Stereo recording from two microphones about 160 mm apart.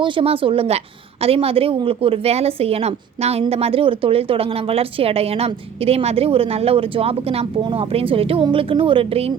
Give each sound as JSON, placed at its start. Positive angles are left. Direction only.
{"t": 0.0, "sound": "speech", "side_deg": -30}